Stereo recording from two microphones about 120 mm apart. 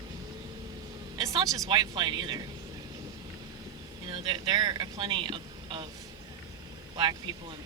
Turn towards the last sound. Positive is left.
turn(degrees=-35)  # may be behind; listen again after turning